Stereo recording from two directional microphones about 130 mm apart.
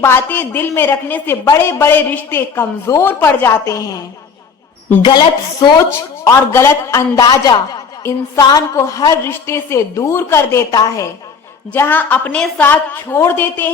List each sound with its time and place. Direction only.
0.0 s a woman's voice: 15° left (ahead or behind)
5.0 s a woman's voice: 35° left (ahead or behind)
5.9 s speech: 20° left (ahead or behind)
11.7 s a woman's voice: 15° left (ahead or behind)